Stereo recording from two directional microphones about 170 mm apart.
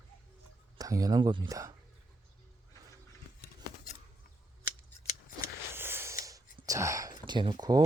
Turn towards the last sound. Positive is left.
turn(degrees=-25)  # may be behind; listen again after turning